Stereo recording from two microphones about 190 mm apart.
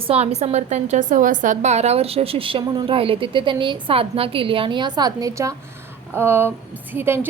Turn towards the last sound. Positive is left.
turn(degrees=-10)  # may be behind; listen again after turning